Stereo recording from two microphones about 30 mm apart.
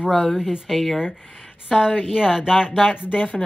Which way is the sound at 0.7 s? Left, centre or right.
Centre.